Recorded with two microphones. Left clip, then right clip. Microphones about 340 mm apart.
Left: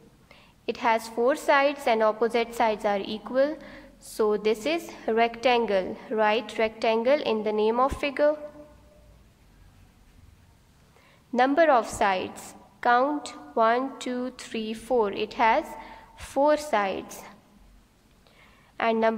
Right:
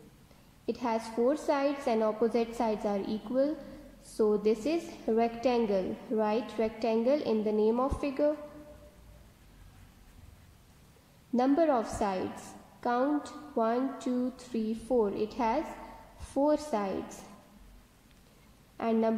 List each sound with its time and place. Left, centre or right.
0.7 s a woman's voice: left
2.0 s a woman's voice: left
2.3 s a woman's voice: left
11.3 s a woman's voice: left
14.9 s a woman's voice: left
15.1 s a woman's voice: left
18.8 s a woman's voice: left